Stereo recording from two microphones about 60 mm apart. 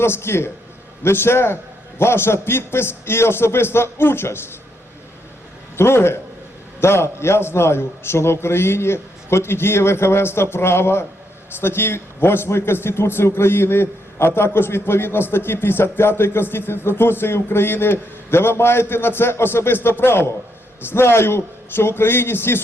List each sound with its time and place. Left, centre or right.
0.0 s a man's voice: left
5.7 s a man's voice: left